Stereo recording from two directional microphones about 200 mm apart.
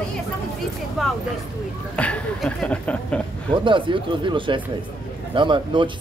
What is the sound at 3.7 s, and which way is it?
Speech, 25° right (ahead or behind).